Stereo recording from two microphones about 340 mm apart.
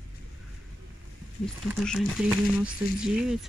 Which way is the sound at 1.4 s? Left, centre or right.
Centre.